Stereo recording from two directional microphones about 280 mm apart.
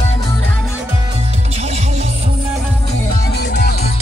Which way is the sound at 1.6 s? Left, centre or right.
Right.